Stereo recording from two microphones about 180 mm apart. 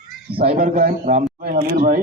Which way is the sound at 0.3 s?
55° right (ahead or behind).